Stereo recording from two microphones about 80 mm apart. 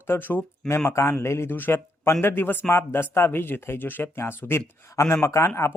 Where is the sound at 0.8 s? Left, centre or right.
Left.